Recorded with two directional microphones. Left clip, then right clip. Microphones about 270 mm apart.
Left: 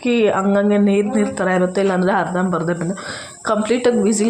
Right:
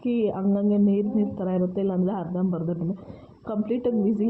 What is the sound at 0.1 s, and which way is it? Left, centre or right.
Speech, left.